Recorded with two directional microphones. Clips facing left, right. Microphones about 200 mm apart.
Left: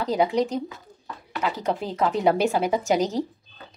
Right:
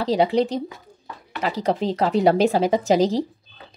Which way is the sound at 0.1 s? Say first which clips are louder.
Right 3 dB; 30° right (ahead or behind).